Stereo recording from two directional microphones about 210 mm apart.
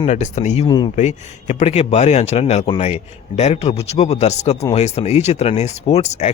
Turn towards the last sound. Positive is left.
turn(degrees=30)  # may be behind; listen again after turning